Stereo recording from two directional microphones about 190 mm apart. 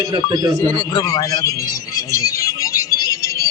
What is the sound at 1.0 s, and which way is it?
Speech, 20° left (ahead or behind).